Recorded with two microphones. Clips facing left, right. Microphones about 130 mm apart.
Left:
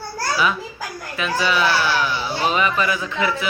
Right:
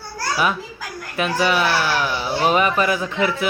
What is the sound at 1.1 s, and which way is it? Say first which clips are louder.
A man's voice: right 2 dB; 55° right (ahead or behind).